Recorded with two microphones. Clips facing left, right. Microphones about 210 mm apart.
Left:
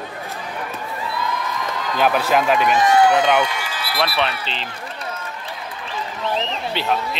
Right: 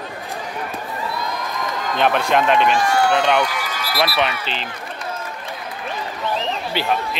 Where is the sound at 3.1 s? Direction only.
5° left (ahead or behind).